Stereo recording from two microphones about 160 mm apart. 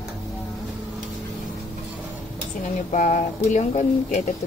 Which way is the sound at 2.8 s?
50° left (ahead or behind).